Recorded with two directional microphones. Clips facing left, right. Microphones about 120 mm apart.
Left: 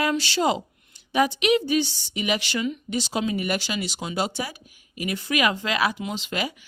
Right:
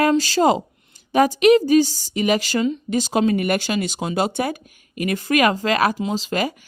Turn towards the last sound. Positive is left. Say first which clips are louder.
# right 6 dB
turn(degrees=-40)  # may be behind; listen again after turning